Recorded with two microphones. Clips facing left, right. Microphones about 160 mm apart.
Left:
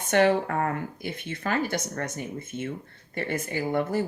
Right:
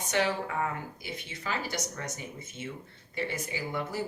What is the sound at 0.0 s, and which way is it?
Speech, 55° left (ahead or behind).